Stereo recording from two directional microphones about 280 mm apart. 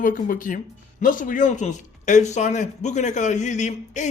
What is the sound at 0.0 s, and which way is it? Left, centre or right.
A man's voice, left.